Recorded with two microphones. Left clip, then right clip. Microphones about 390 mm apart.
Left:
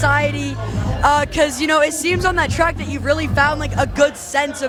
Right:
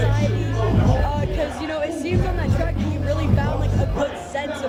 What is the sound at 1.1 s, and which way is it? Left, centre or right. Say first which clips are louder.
Speech: left 10 dB; left.